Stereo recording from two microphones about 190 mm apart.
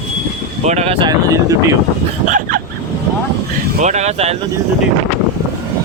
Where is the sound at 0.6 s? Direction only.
35° right (ahead or behind).